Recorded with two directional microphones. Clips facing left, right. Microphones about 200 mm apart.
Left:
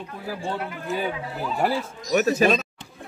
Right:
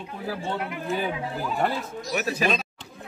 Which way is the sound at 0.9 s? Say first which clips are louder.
Left 1 dB; 5° left (ahead or behind).